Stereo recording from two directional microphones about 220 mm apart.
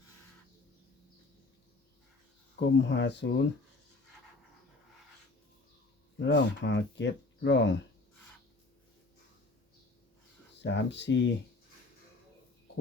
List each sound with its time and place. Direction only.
2.6 s speech: 55° left (ahead or behind)
6.1 s speech: 55° left (ahead or behind)
10.5 s speech: 50° left (ahead or behind)